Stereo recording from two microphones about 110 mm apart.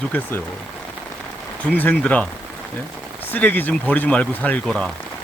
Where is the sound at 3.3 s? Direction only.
15° left (ahead or behind).